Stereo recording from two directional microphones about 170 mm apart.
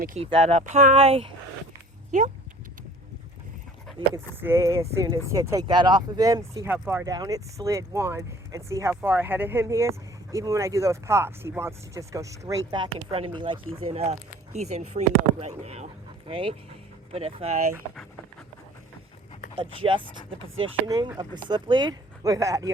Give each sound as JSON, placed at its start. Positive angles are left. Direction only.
{"t": 0.2, "sound": "speech", "side_deg": -40}
{"t": 0.9, "sound": "speech", "side_deg": -35}
{"t": 2.1, "sound": "speech", "side_deg": -45}
{"t": 4.1, "sound": "speech", "side_deg": -15}
{"t": 17.1, "sound": "speech", "side_deg": -40}
{"t": 19.5, "sound": "speech", "side_deg": -30}